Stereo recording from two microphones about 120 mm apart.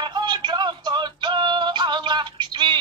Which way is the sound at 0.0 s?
40° right (ahead or behind).